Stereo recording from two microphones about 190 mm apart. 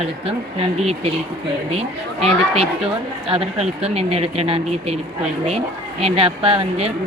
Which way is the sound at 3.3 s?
35° right (ahead or behind).